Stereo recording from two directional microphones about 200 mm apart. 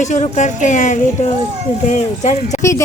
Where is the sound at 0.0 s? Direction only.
35° left (ahead or behind).